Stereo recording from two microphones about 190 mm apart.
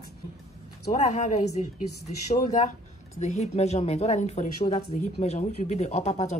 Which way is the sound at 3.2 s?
35° left (ahead or behind).